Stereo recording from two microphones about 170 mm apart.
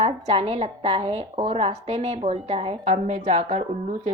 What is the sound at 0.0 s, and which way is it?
Speech, 35° right (ahead or behind).